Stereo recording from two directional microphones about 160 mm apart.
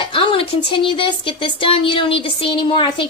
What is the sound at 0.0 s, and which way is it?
Speech, 35° left (ahead or behind).